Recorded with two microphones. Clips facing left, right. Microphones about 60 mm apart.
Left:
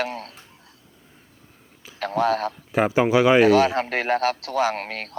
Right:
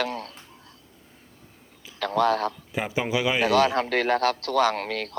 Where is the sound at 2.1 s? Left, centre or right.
Left.